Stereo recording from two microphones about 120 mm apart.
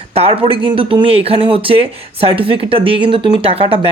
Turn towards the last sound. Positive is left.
turn(degrees=-50)  # may be behind; listen again after turning